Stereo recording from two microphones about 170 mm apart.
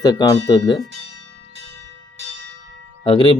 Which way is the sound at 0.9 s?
85° right.